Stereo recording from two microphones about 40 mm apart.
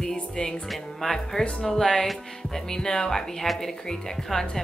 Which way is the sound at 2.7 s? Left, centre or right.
Centre.